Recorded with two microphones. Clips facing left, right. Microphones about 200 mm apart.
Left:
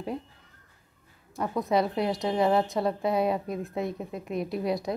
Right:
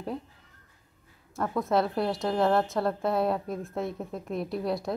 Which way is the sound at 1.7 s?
Centre (ahead or behind).